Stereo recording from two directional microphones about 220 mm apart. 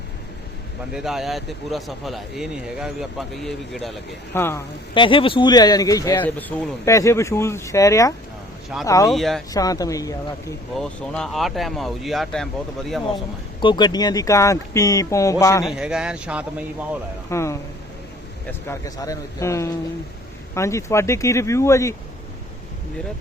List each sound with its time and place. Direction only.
0.9 s speech: centre (ahead or behind)
4.9 s speech: 25° left (ahead or behind)
6.5 s speech: 5° left (ahead or behind)
9.0 s speech: centre (ahead or behind)
9.5 s speech: 15° left (ahead or behind)
10.8 s speech: 5° left (ahead or behind)
13.6 s speech: 20° left (ahead or behind)
15.6 s speech: centre (ahead or behind)
17.2 s speech: 15° left (ahead or behind)
18.7 s speech: 15° left (ahead or behind)